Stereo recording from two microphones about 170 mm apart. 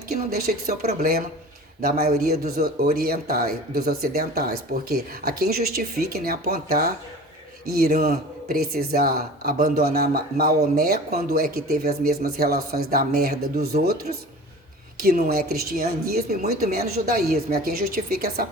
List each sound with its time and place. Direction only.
0.3 s a man's voice: 65° right (ahead or behind)
1.8 s a man's voice: 60° right (ahead or behind)
15.0 s a man's voice: 60° right (ahead or behind)